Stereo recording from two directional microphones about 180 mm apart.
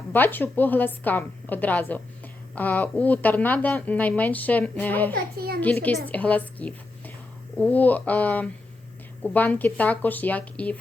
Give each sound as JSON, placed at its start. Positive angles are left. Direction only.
{"t": 0.1, "sound": "a woman's voice", "side_deg": 10}
{"t": 5.1, "sound": "a child's voice", "side_deg": -55}
{"t": 5.5, "sound": "a woman's voice", "side_deg": 10}